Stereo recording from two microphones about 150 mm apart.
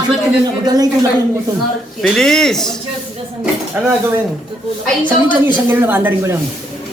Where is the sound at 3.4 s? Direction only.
5° right (ahead or behind).